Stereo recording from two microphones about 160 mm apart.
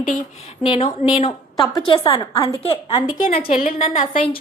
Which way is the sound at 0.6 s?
35° left (ahead or behind).